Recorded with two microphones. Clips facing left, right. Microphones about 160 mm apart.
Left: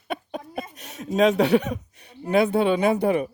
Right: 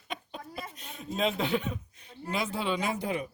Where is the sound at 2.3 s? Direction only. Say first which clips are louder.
Left 12 dB; 60° left (ahead or behind).